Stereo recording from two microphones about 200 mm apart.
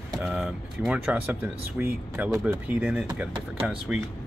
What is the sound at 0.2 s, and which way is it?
Speech, 5° right (ahead or behind).